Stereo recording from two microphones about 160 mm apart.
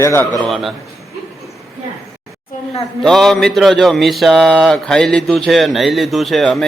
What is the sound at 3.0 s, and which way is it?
Mantra, centre (ahead or behind).